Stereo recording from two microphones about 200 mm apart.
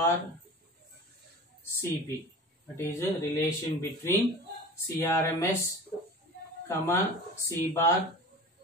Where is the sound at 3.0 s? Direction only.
15° left (ahead or behind).